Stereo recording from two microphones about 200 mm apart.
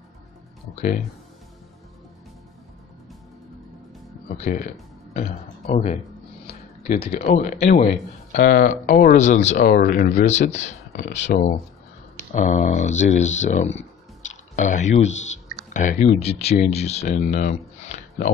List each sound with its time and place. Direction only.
5.1 s a man's voice: 30° left (ahead or behind)
9.6 s speech: 50° left (ahead or behind)
17.8 s a sound: 35° left (ahead or behind)